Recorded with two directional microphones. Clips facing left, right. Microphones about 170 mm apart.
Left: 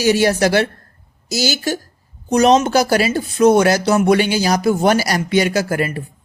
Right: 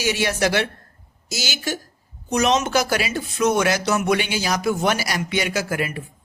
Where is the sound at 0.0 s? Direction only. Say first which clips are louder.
Left 7 dB; 40° left (ahead or behind).